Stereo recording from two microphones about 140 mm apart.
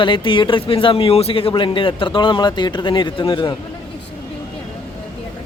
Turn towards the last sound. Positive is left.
turn(degrees=30)  # may be behind; listen again after turning